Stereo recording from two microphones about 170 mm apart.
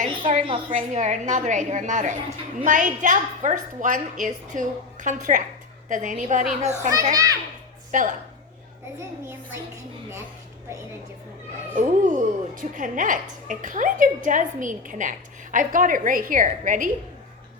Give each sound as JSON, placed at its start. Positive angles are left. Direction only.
{"t": 0.2, "sound": "a woman's voice", "side_deg": -35}
{"t": 0.7, "sound": "speech", "side_deg": -45}
{"t": 7.1, "sound": "a child's voice", "side_deg": -20}
{"t": 7.9, "sound": "a woman's voice", "side_deg": -50}
{"t": 11.7, "sound": "speech", "side_deg": -50}